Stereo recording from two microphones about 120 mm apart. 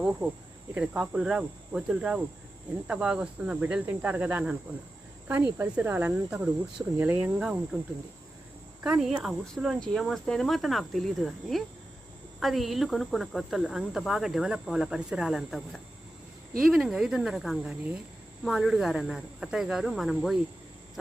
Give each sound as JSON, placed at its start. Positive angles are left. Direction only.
{"t": 0.7, "sound": "cricket", "side_deg": -10}
{"t": 8.8, "sound": "speech", "side_deg": -5}